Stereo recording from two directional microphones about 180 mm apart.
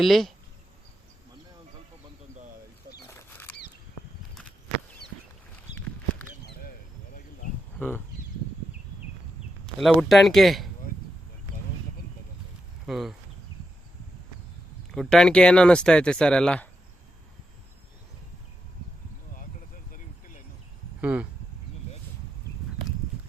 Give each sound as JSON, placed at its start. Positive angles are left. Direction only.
{"t": 0.0, "sound": "speech", "side_deg": 0}
{"t": 3.1, "sound": "a sound", "side_deg": 10}
{"t": 6.4, "sound": "a sound", "side_deg": 55}
{"t": 7.8, "sound": "speech", "side_deg": 10}
{"t": 9.8, "sound": "speech", "side_deg": 0}
{"t": 12.8, "sound": "speech", "side_deg": 0}
{"t": 14.9, "sound": "speech", "side_deg": 5}
{"t": 21.0, "sound": "speech", "side_deg": -5}